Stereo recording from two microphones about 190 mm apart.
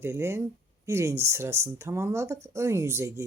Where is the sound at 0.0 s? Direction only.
15° right (ahead or behind).